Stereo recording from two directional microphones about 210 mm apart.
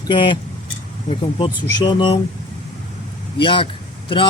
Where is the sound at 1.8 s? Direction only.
20° left (ahead or behind).